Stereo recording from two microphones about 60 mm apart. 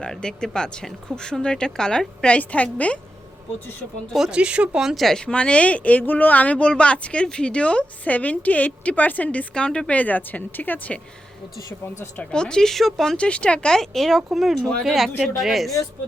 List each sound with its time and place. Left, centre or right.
0.0 s speech: centre
4.3 s speech: centre
4.8 s speech: centre
5.2 s speech: centre
9.6 s speech: centre
12.3 s speech: centre
13.1 s speech: centre